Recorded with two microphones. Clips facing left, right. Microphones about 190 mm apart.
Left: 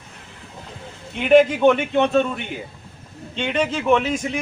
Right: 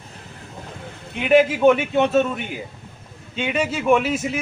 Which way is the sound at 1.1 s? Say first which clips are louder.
Left 2 dB; 5° right (ahead or behind).